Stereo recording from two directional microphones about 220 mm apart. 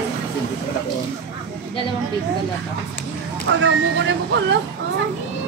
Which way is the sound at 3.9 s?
55° right (ahead or behind).